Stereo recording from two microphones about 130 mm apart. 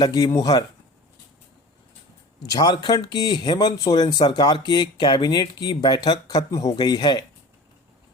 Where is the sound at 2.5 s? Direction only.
30° left (ahead or behind).